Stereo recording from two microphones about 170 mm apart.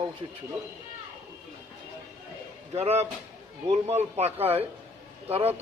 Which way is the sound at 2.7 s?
40° right (ahead or behind).